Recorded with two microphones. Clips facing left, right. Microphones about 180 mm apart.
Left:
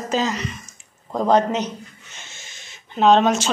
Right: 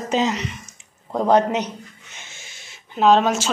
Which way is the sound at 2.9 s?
5° right (ahead or behind).